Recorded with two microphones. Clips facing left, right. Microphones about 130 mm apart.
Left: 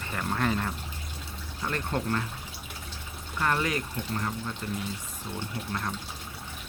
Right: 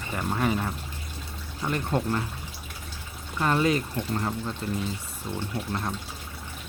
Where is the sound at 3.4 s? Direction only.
20° right (ahead or behind).